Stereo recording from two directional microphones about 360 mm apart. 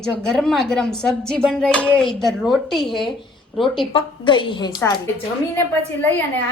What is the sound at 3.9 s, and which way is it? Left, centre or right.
A woman's voice, centre.